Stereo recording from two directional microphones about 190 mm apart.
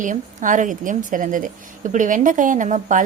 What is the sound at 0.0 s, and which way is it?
A woman's voice, 40° right (ahead or behind).